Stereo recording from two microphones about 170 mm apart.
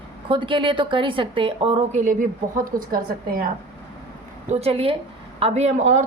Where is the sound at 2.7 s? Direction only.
60° right (ahead or behind).